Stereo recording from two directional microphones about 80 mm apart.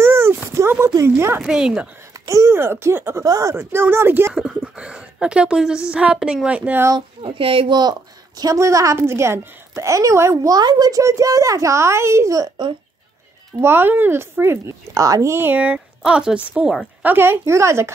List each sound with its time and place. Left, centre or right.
0.0 s a sound: right
1.0 s speech: right
1.4 s speech: centre
2.1 s speech: right
3.3 s a woman's voice: right
3.5 s speech: right
4.3 s speech: centre
7.6 s speech: right
8.4 s a woman's voice: right
13.6 s speech: right
15.3 s speech: right